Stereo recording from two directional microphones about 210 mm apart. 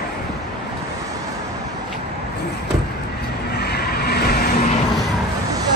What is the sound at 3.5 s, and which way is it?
Vehicle, 50° left (ahead or behind).